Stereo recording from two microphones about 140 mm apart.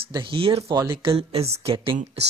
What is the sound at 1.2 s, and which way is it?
Speech, 45° right (ahead or behind).